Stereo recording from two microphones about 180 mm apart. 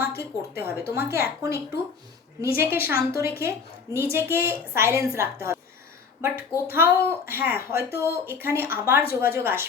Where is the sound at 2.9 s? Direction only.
60° left (ahead or behind).